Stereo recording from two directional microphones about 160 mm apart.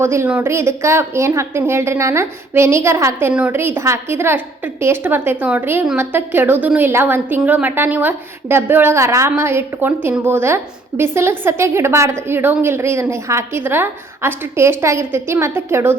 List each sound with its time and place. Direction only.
0.0 s a woman's voice: 15° right (ahead or behind)